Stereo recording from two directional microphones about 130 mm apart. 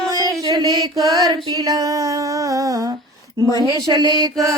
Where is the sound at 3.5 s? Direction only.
30° left (ahead or behind).